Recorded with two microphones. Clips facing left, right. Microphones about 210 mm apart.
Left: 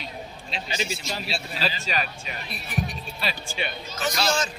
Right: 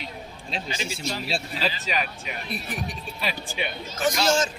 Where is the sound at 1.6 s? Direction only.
15° right (ahead or behind).